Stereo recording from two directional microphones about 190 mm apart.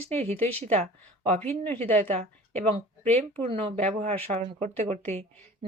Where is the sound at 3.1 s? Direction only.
30° right (ahead or behind).